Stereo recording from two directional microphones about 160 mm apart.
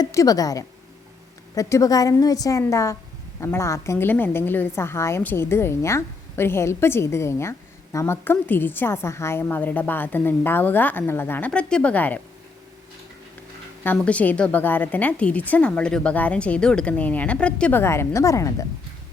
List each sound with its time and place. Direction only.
0.0 s a woman's voice: 20° left (ahead or behind)
13.8 s a woman's voice: 10° left (ahead or behind)